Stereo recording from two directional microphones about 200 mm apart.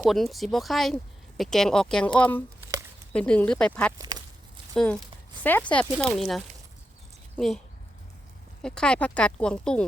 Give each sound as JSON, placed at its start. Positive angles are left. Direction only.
{"t": 0.0, "sound": "speech", "side_deg": 0}
{"t": 3.9, "sound": "walk", "side_deg": -20}
{"t": 4.7, "sound": "speech", "side_deg": 5}
{"t": 8.6, "sound": "speech", "side_deg": 5}